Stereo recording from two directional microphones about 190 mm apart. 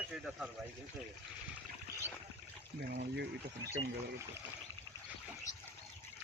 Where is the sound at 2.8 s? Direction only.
55° right (ahead or behind).